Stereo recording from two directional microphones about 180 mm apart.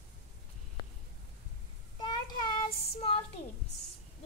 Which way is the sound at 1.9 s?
25° left (ahead or behind).